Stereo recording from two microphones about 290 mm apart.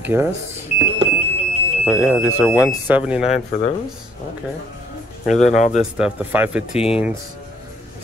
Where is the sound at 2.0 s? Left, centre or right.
Centre.